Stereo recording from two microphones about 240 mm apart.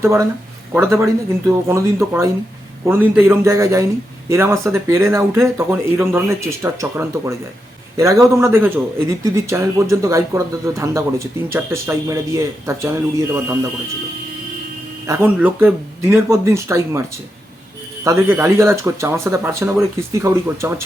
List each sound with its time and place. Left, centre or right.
0.0 s speech: centre
2.8 s speech: centre
15.0 s speech: centre
18.0 s speech: centre